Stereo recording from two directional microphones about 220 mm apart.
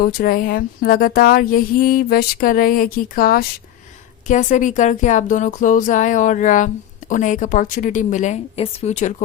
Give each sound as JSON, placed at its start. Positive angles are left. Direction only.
{"t": 0.0, "sound": "speech", "side_deg": 40}